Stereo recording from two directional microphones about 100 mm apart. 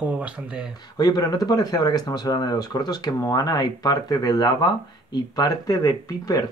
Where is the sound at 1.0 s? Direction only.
40° left (ahead or behind).